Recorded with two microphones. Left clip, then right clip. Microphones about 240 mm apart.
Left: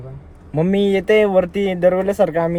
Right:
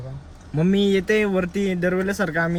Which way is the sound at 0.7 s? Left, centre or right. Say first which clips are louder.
Left 4 dB; left.